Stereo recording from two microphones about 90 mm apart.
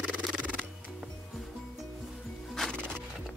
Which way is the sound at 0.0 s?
15° right (ahead or behind).